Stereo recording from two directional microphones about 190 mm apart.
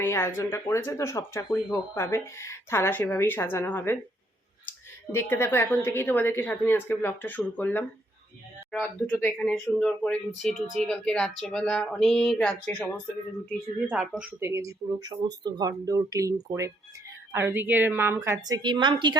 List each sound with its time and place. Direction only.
0.0 s speech: 15° left (ahead or behind)
5.1 s speech: 10° left (ahead or behind); by 19.1 s 25° right (ahead or behind)